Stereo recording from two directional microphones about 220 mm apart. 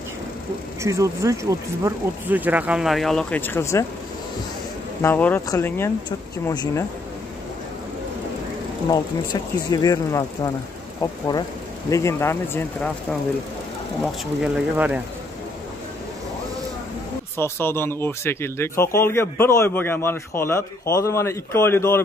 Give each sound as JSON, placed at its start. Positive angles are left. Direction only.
{"t": 0.8, "sound": "speech", "side_deg": -15}
{"t": 5.0, "sound": "speech", "side_deg": 10}
{"t": 8.8, "sound": "speech", "side_deg": 15}
{"t": 14.4, "sound": "speech", "side_deg": -5}
{"t": 17.4, "sound": "speech", "side_deg": 10}